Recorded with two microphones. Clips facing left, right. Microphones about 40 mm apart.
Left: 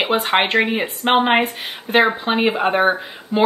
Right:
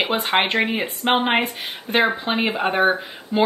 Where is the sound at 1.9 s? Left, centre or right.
Centre.